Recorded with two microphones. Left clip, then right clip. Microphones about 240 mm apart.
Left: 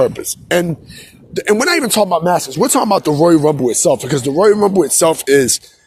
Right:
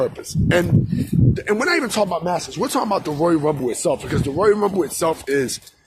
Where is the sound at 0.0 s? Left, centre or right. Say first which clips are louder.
Left 7 dB; left.